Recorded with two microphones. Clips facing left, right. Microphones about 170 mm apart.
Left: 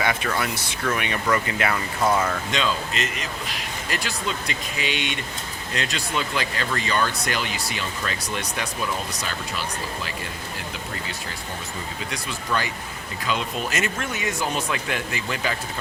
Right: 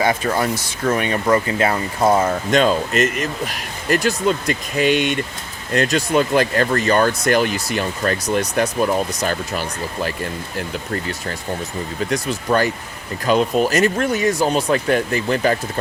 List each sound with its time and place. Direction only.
0.0 s speech: 35° right (ahead or behind)
2.5 s speech: 50° right (ahead or behind)
12.1 s speech: 45° right (ahead or behind)